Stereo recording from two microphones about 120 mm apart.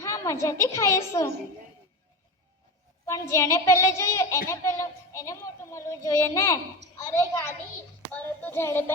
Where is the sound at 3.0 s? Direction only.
25° left (ahead or behind).